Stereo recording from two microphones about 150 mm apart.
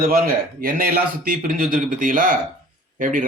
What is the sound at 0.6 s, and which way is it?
Speech, 70° right (ahead or behind).